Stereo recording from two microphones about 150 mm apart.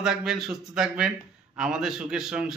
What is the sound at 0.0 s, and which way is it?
A man's voice, 5° right (ahead or behind).